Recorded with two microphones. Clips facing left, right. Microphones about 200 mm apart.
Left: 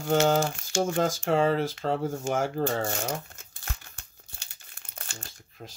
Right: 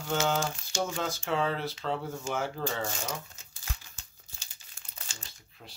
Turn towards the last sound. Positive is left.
turn(degrees=50)  # may be behind; listen again after turning